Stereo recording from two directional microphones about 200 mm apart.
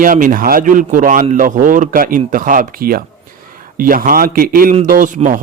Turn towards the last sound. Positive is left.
turn(degrees=-40)  # may be behind; listen again after turning